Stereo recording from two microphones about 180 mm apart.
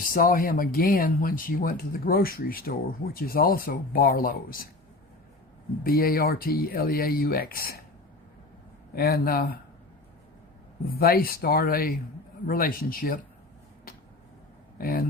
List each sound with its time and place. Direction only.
0.0 s speech: 50° left (ahead or behind)
5.8 s speech: 55° left (ahead or behind)
9.0 s speech: 60° left (ahead or behind)
10.8 s speech: 60° left (ahead or behind)
14.8 s speech: 55° left (ahead or behind)